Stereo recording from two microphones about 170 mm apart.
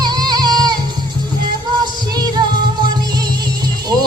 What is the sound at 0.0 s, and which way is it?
Music, 25° right (ahead or behind).